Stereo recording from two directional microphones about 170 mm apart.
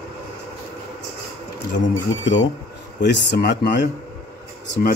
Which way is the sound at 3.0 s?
85° left.